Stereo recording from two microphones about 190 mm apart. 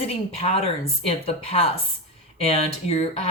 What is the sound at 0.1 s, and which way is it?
A woman's voice, 30° left (ahead or behind).